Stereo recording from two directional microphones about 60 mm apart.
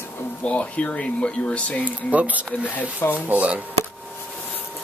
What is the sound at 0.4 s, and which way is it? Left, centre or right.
Speech, left.